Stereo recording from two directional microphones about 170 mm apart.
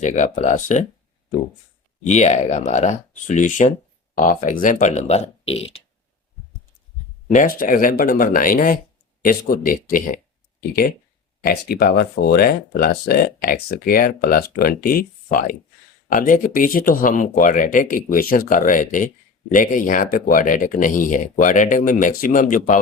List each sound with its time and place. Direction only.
0.0 s speech: 45° left (ahead or behind)
2.0 s speech: 40° left (ahead or behind)
7.3 s speech: 50° left (ahead or behind)
11.7 s speech: 65° left (ahead or behind); by 22.8 s 50° left (ahead or behind)